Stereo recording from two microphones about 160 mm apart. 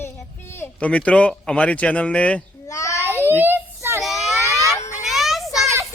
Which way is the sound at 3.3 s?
10° right (ahead or behind).